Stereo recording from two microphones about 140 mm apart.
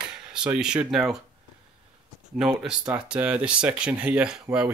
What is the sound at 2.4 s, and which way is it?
Speech, 5° right (ahead or behind).